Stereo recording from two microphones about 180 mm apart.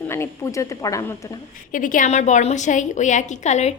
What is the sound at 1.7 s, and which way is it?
A woman's voice, 50° left (ahead or behind).